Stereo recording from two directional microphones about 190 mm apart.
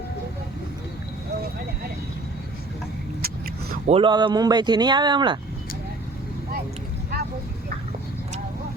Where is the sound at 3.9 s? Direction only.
25° right (ahead or behind).